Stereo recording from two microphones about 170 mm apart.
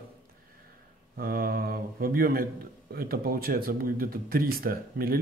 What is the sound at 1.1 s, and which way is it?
Speech, 60° right (ahead or behind).